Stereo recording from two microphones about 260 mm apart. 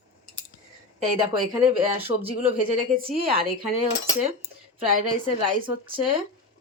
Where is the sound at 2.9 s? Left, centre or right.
Right.